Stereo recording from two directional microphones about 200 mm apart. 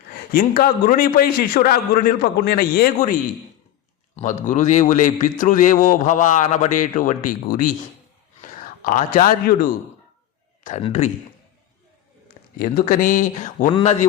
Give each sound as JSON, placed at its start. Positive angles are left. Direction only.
{"t": 0.3, "sound": "a man's voice", "side_deg": 45}
{"t": 4.2, "sound": "a man's voice", "side_deg": 40}
{"t": 12.5, "sound": "a man's voice", "side_deg": 45}